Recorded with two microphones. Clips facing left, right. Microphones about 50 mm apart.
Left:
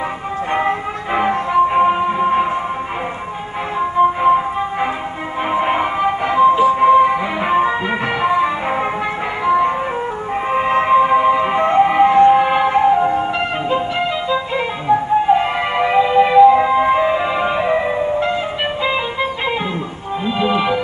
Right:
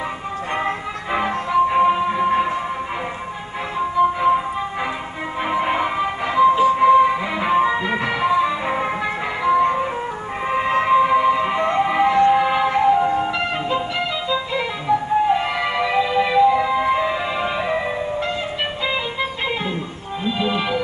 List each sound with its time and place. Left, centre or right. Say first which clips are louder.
0.5 s music: left 5 dB; left
3.9 s music: left 4 dB; left
7.5 s music: left 1 dB; left
8.2 s music: left 2 dB; left; by 18.3 s centre
20.3 s music: left 5 dB; centre